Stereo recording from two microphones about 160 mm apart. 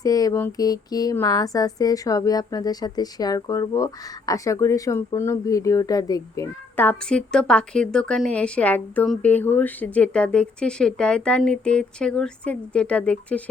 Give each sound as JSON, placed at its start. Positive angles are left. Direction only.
{"t": 0.0, "sound": "a woman's voice", "side_deg": 20}